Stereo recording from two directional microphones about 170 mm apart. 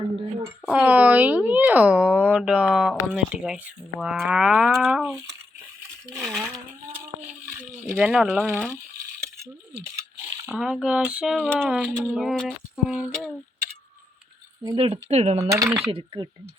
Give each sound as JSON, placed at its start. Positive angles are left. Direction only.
{"t": 0.6, "sound": "speech", "side_deg": -5}
{"t": 6.1, "sound": "speech", "side_deg": -5}
{"t": 7.5, "sound": "speech", "side_deg": -10}
{"t": 10.4, "sound": "speech", "side_deg": -5}
{"t": 14.6, "sound": "speech", "side_deg": -30}
{"t": 15.4, "sound": "speech", "side_deg": -20}
{"t": 15.9, "sound": "speech", "side_deg": -30}